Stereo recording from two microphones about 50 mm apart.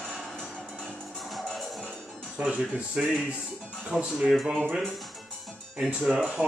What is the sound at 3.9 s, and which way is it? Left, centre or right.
Speech, centre.